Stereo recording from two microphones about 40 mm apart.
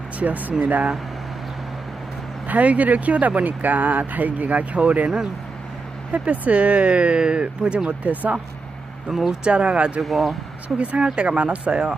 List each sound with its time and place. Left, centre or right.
0.2 s speech: right
2.5 s speech: right
9.1 s speech: centre
9.4 s speech: right
10.0 s speech: centre
10.8 s speech: right